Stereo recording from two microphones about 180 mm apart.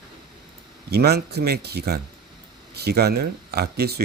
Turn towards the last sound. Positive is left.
turn(degrees=-60)  # may be behind; listen again after turning